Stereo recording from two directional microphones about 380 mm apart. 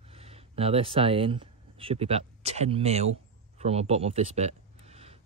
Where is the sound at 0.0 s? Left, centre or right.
Centre.